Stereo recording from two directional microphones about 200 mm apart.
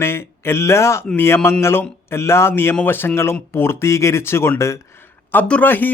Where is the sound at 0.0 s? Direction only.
10° left (ahead or behind).